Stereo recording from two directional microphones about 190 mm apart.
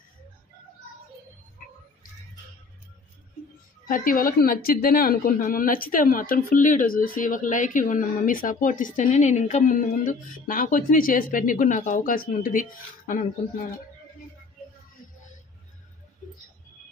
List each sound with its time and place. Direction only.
3.8 s a woman's voice: 45° left (ahead or behind)